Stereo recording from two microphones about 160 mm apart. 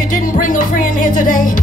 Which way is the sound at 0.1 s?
55° left (ahead or behind).